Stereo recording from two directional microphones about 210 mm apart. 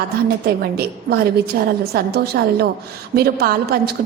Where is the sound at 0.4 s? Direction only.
45° right (ahead or behind).